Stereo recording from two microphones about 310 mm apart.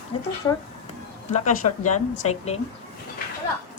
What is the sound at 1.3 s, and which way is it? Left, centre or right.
A woman's voice, left.